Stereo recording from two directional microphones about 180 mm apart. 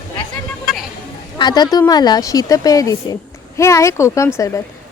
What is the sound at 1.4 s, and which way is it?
A woman's voice, 25° left (ahead or behind).